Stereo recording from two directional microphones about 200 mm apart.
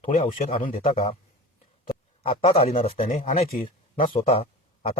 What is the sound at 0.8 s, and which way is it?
Speech, 30° left (ahead or behind).